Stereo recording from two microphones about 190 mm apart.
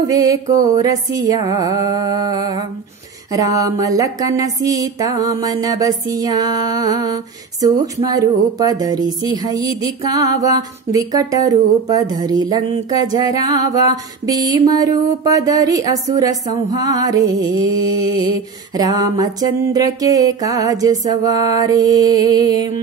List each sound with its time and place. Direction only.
0.0 s speech: 20° right (ahead or behind)